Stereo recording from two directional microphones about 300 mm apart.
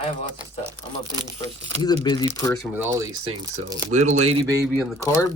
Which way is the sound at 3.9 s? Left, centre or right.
Right.